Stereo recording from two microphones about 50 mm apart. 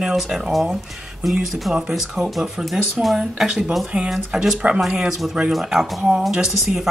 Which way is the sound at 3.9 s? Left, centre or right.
Right.